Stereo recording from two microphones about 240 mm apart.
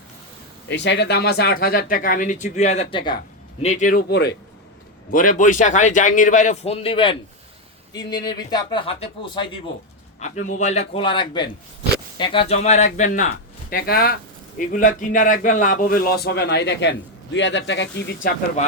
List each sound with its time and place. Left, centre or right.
0.7 s a man's voice: left; by 9.5 s centre
10.2 s a man's voice: left